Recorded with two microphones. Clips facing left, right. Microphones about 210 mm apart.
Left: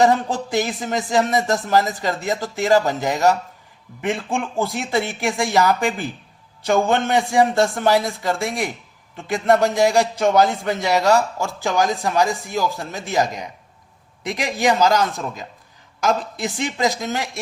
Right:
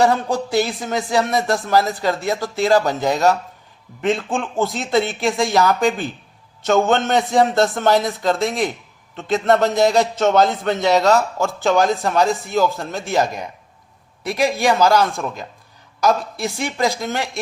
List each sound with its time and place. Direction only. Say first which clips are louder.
0.0 s speech: even; 15° left (ahead or behind)
14.6 s speech: even; 15° left (ahead or behind)